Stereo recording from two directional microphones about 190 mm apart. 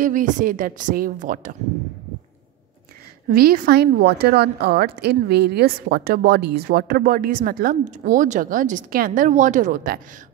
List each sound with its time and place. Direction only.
0.0 s a woman's voice: 45° right (ahead or behind)
3.3 s a woman's voice: 50° right (ahead or behind)